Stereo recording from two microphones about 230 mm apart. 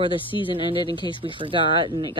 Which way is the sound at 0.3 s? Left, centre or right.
Left.